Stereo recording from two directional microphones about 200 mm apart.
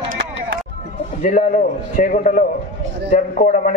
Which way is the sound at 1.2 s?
40° left (ahead or behind).